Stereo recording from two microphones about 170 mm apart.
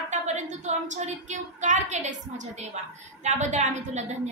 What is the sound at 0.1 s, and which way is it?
A woman's voice, 45° right (ahead or behind).